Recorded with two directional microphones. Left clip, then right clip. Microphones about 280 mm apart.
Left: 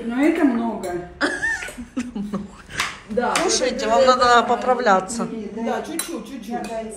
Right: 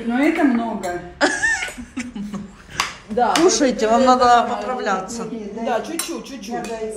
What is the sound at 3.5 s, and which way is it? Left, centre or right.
Speech, right.